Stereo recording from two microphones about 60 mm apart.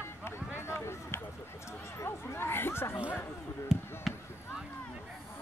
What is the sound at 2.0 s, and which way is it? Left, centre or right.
Speech, left.